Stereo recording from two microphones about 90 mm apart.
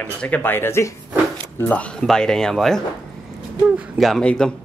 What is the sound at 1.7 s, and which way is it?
A man's voice, 15° left (ahead or behind).